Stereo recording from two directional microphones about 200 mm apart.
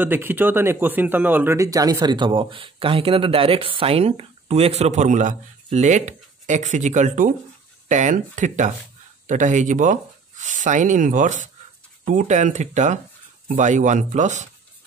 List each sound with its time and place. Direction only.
0.0 s speech: 10° right (ahead or behind); by 14.5 s 35° right (ahead or behind)